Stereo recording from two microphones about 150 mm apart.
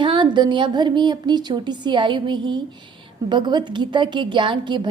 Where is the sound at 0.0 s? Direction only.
30° right (ahead or behind).